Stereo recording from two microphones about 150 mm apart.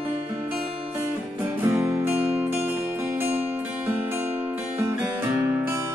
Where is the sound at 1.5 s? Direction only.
15° right (ahead or behind).